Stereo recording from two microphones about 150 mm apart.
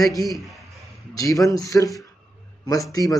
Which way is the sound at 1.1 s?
20° left (ahead or behind).